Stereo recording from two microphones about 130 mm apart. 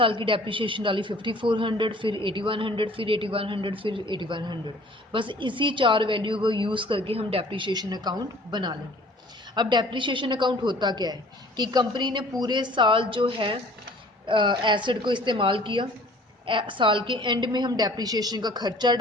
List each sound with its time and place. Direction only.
0.0 s a man's voice: 40° right (ahead or behind)